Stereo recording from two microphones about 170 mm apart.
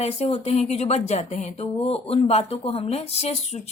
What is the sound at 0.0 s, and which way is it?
Speech, 40° left (ahead or behind).